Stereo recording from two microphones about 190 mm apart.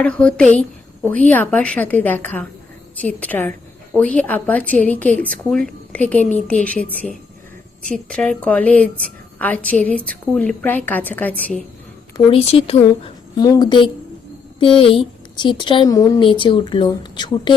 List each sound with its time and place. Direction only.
0.0 s a woman's voice: 5° left (ahead or behind)
12.4 s speech: 30° left (ahead or behind)